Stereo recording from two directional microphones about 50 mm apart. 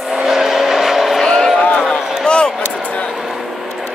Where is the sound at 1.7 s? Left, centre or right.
Centre.